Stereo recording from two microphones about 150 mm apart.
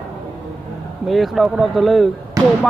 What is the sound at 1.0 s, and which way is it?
A man's voice, centre (ahead or behind).